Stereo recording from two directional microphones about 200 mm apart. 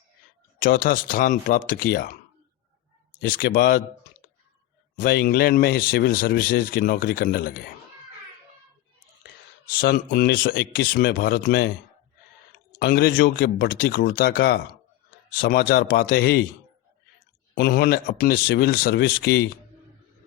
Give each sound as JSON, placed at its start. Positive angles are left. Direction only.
{"t": 0.6, "sound": "speech", "side_deg": 45}
{"t": 3.2, "sound": "speech", "side_deg": 45}
{"t": 4.9, "sound": "speech", "side_deg": 45}
{"t": 9.6, "sound": "speech", "side_deg": 45}
{"t": 12.8, "sound": "speech", "side_deg": 50}
{"t": 17.5, "sound": "speech", "side_deg": 50}